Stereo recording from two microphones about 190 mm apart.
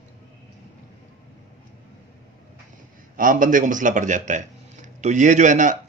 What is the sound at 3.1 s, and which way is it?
Speech, 45° right (ahead or behind).